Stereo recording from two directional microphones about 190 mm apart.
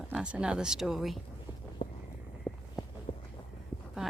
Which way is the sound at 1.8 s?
30° left (ahead or behind).